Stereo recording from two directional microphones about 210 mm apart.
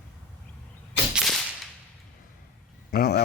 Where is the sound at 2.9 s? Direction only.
50° left (ahead or behind).